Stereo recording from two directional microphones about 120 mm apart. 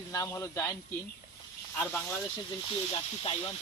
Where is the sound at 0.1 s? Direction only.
25° left (ahead or behind).